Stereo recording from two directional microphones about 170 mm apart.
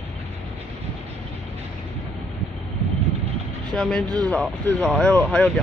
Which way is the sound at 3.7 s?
5° left (ahead or behind).